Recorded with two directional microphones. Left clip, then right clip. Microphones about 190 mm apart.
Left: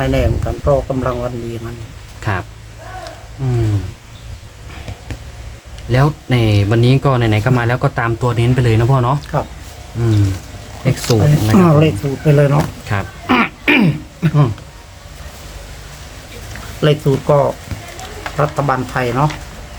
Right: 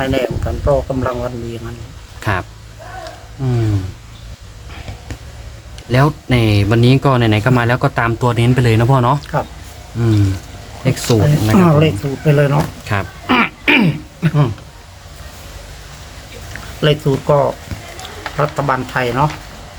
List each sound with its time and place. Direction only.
0.0 s speech: centre (ahead or behind)
2.2 s speech: 45° right (ahead or behind)
5.9 s speech: 45° right (ahead or behind)
9.2 s speech: centre (ahead or behind)
11.0 s speech: 5° right (ahead or behind)
12.8 s a sound: 35° right (ahead or behind)
13.2 s a sound: 5° left (ahead or behind)
16.5 s speech: centre (ahead or behind)